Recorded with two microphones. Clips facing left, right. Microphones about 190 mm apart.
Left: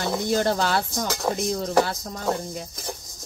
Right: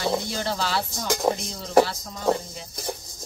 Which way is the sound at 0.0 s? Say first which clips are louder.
Left 3 dB; 50° left (ahead or behind).